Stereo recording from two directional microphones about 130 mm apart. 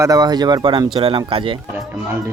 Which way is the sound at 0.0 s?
30° right (ahead or behind).